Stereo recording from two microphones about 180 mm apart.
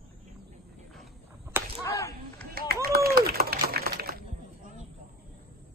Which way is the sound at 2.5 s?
55° right (ahead or behind).